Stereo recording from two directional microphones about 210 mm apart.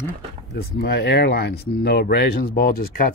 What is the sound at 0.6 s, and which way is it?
Speech, 50° left (ahead or behind).